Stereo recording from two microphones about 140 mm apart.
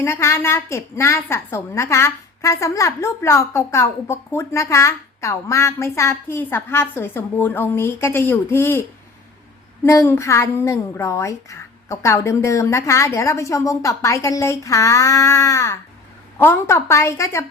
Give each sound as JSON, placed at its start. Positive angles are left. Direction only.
{"t": 0.0, "sound": "a woman's voice", "side_deg": 20}